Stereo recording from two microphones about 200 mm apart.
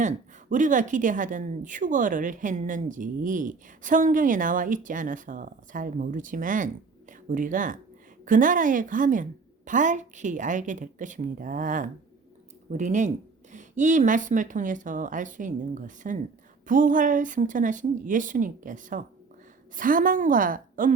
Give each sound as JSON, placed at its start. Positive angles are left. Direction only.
{"t": 0.5, "sound": "a woman's voice", "side_deg": -40}